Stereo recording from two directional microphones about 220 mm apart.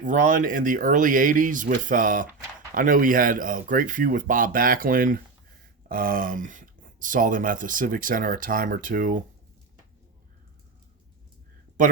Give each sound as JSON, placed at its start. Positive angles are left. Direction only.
{"t": 0.0, "sound": "speech", "side_deg": -35}